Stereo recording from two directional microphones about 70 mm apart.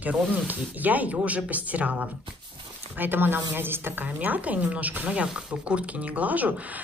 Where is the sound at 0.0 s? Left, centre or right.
Right.